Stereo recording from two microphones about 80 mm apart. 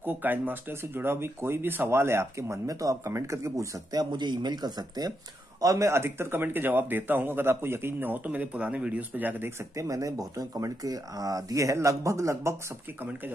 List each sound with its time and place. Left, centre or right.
0.0 s speech: right
5.6 s a man's voice: right
9.8 s speech: right